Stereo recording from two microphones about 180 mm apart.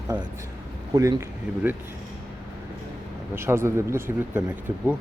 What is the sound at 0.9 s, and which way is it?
Speech, 20° right (ahead or behind).